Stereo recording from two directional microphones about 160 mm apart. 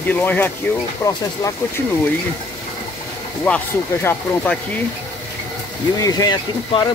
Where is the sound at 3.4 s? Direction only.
10° left (ahead or behind).